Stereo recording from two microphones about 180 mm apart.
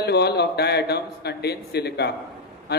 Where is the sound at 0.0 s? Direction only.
65° left (ahead or behind).